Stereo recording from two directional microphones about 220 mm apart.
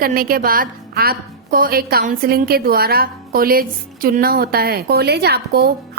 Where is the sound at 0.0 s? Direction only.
40° right (ahead or behind).